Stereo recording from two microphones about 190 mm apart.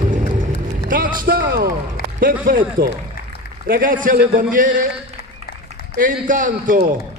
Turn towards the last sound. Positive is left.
turn(degrees=-45)  # may be behind; listen again after turning